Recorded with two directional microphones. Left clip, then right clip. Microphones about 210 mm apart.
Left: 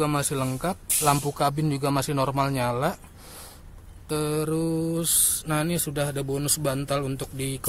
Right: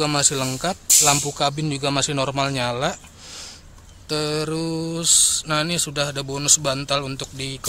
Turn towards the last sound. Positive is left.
turn(degrees=5)  # may be behind; listen again after turning